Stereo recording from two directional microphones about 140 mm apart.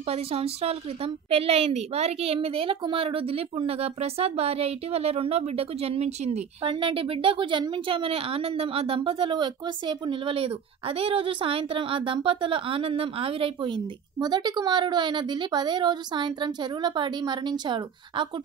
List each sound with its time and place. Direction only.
0.1 s a woman's voice: 45° right (ahead or behind)